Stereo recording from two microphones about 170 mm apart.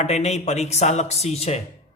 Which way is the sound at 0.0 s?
40° left (ahead or behind).